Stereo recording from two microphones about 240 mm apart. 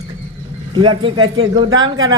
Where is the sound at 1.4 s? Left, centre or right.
Right.